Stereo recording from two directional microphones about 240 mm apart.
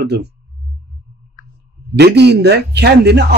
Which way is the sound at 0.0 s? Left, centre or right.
Right.